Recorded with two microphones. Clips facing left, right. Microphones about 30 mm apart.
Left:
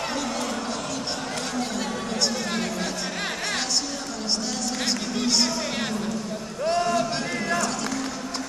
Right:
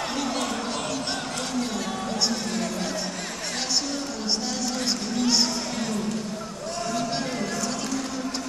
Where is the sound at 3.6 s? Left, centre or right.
Centre.